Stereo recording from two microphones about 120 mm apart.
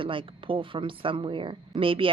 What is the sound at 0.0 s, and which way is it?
Speech, 45° right (ahead or behind).